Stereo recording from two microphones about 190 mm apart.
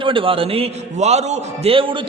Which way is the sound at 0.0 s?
25° right (ahead or behind).